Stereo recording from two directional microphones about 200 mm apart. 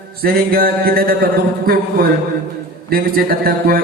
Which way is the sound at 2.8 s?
50° right (ahead or behind).